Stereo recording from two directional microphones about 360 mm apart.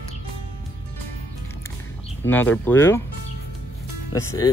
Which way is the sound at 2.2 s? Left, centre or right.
Centre.